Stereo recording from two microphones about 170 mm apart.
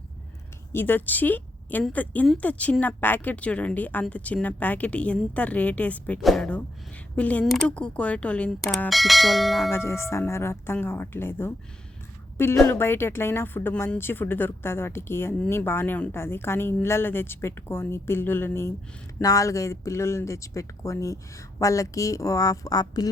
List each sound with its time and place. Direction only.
0.7 s speech: 15° left (ahead or behind)
9.7 s speech: 15° left (ahead or behind)